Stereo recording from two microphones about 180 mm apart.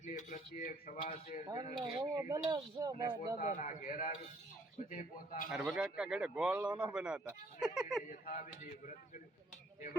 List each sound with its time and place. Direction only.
0.0 s a man's voice: 40° left (ahead or behind)
1.8 s speech: 20° right (ahead or behind)
3.3 s a man's voice: 45° left (ahead or behind)
5.5 s speech: 5° right (ahead or behind)
8.2 s a man's voice: 45° left (ahead or behind)